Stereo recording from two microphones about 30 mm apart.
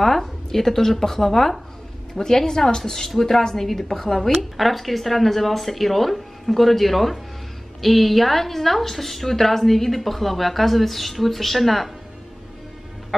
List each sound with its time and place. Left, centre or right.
0.0 s a woman's voice: centre